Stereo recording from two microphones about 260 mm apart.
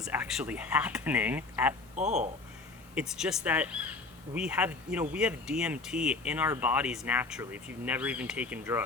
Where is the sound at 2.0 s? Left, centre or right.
Right.